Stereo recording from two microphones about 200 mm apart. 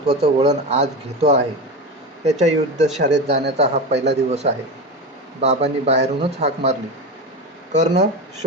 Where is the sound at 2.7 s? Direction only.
35° right (ahead or behind).